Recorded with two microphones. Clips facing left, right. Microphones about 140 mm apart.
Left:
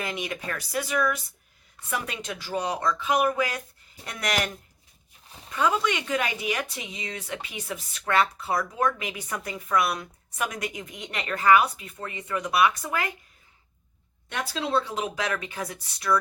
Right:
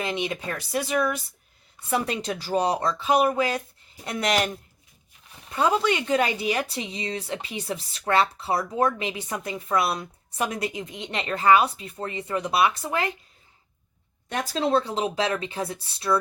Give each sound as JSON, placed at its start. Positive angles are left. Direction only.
{"t": 0.0, "sound": "a woman's voice", "side_deg": -25}
{"t": 14.3, "sound": "speech", "side_deg": -40}